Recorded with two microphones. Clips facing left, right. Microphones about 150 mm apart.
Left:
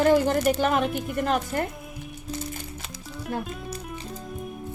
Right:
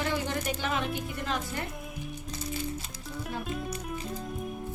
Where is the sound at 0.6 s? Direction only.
55° left (ahead or behind).